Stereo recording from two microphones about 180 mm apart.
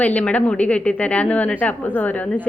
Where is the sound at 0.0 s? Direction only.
5° left (ahead or behind).